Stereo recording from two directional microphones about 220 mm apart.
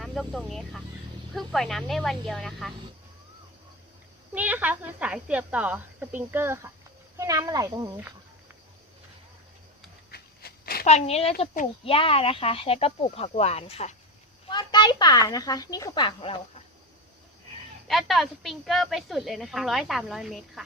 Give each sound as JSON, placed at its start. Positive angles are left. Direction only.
{"t": 0.0, "sound": "speech", "side_deg": 0}
{"t": 4.4, "sound": "speech", "side_deg": -5}
{"t": 10.1, "sound": "a sound", "side_deg": 45}
{"t": 10.8, "sound": "speech", "side_deg": 30}
{"t": 17.8, "sound": "speech", "side_deg": 0}